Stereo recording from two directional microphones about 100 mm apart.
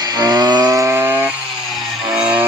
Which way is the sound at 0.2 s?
40° right (ahead or behind).